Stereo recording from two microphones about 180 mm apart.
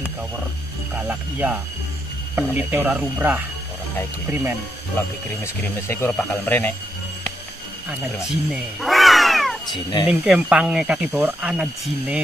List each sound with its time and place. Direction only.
0.9 s speech: 10° right (ahead or behind)
5.4 s speech: 15° left (ahead or behind)
8.5 s cat: centre (ahead or behind)
9.7 s speech: 25° left (ahead or behind)
10.0 s speech: 5° right (ahead or behind)